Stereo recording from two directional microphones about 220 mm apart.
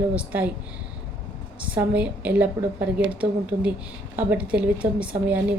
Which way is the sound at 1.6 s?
5° right (ahead or behind).